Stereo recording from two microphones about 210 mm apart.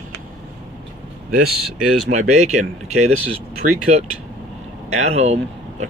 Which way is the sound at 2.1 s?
35° right (ahead or behind).